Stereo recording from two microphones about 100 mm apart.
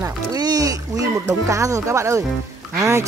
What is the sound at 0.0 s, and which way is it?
Music, 40° right (ahead or behind).